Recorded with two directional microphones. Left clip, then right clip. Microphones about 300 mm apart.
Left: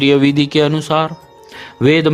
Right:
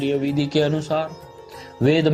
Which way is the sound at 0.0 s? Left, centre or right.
Left.